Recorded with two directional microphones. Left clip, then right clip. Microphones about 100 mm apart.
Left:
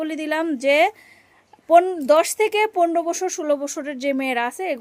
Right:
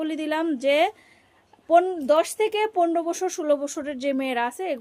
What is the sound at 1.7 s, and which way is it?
A woman's voice, 50° left (ahead or behind).